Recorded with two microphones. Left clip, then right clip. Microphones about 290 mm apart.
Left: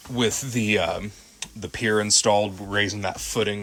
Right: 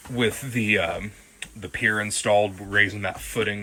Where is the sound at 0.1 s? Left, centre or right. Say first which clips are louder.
Even; centre.